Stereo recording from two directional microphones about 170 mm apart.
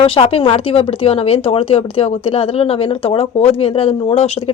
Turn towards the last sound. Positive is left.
turn(degrees=35)  # may be behind; listen again after turning